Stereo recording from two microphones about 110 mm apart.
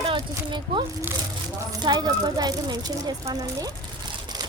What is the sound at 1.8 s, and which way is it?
Speech, 40° right (ahead or behind).